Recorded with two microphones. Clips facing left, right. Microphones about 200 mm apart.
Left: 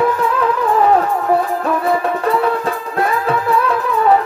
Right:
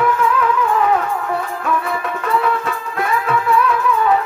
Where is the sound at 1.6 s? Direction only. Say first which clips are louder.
Left 5 dB; 35° left (ahead or behind).